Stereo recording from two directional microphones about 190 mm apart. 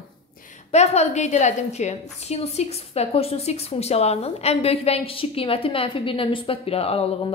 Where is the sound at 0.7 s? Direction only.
35° left (ahead or behind).